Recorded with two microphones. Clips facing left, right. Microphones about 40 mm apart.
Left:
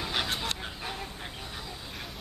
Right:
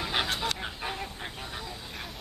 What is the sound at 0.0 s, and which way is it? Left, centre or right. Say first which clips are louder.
Chicken: right 2 dB; centre.